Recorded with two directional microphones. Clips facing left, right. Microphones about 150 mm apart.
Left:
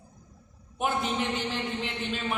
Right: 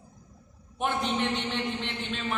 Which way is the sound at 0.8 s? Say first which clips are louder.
Even; 5° left (ahead or behind).